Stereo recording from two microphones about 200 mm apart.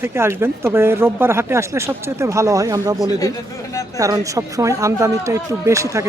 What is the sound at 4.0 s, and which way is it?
A woman's voice, 15° right (ahead or behind).